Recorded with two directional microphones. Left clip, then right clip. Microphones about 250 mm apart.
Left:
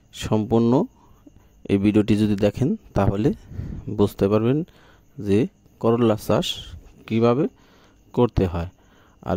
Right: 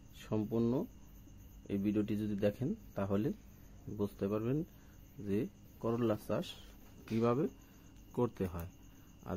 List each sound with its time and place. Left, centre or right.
0.1 s speech: left